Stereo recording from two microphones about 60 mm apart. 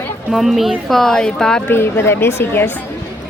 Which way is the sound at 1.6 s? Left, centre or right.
Left.